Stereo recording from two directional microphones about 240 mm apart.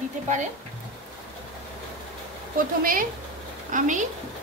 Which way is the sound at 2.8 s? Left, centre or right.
Right.